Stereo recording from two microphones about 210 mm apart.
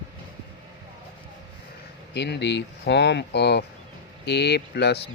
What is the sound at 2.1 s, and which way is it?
Speech, 55° left (ahead or behind).